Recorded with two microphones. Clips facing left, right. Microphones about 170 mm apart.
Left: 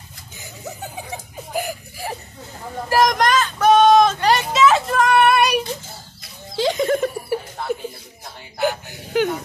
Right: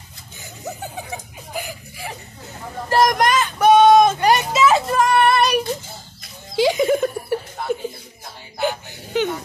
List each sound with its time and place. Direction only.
1.5 s chuckle: 45° left (ahead or behind)
2.9 s vehicle: 5° right (ahead or behind)
4.5 s child singing: 5° right (ahead or behind)
6.5 s music: 10° right (ahead or behind)
7.7 s a sound: 5° left (ahead or behind)